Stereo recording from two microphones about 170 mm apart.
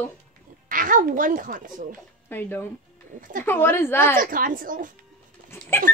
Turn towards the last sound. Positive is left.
turn(degrees=15)  # may be behind; listen again after turning